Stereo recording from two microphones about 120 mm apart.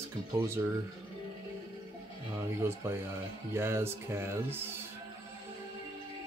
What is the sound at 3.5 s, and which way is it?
Music, 20° right (ahead or behind).